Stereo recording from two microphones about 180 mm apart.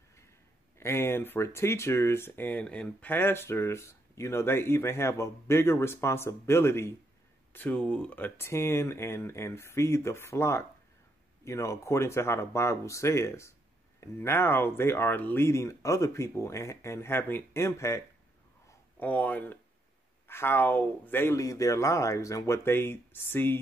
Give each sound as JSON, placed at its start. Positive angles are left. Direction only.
{"t": 0.7, "sound": "speech", "side_deg": 15}